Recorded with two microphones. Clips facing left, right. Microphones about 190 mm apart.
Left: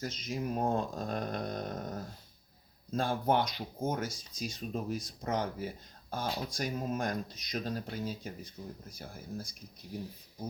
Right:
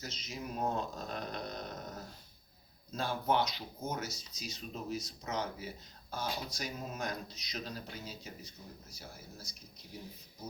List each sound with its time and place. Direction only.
0.0 s speech: 50° left (ahead or behind)